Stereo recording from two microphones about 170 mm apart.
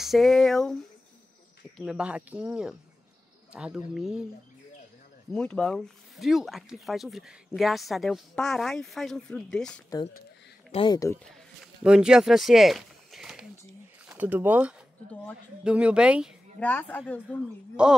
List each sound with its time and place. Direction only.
0.0 s speech: centre (ahead or behind)
1.8 s speech: 5° right (ahead or behind)
5.3 s speech: 5° left (ahead or behind)
10.7 s speech: 30° left (ahead or behind)
11.2 s a sound: centre (ahead or behind)
14.0 s speech: 10° right (ahead or behind)
16.5 s a woman's voice: 10° left (ahead or behind)
17.8 s speech: 5° right (ahead or behind)